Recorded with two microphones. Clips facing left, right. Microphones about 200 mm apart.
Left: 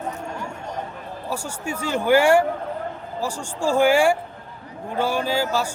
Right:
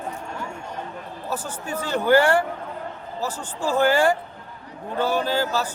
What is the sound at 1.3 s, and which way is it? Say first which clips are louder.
A man's voice: even; 10° left (ahead or behind).